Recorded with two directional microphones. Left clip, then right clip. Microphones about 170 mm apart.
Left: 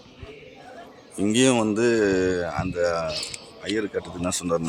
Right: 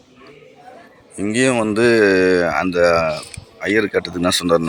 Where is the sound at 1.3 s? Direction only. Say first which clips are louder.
Right 4 dB; 5° left (ahead or behind).